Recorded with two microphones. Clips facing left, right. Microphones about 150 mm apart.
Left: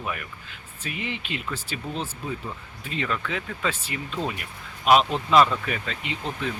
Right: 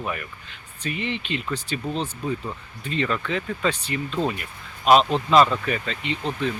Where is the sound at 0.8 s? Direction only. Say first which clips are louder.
Right 4 dB; 5° left (ahead or behind).